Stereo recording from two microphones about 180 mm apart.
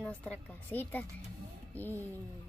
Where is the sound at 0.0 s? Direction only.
5° left (ahead or behind).